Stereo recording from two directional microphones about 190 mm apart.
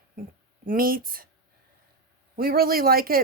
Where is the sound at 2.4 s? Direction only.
50° right (ahead or behind).